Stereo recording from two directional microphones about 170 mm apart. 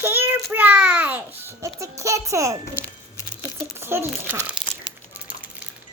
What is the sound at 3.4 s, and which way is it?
Crumpling, 15° right (ahead or behind).